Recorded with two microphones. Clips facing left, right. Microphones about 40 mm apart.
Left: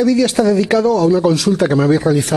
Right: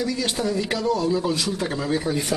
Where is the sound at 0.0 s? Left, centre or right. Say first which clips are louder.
Left 12 dB; left.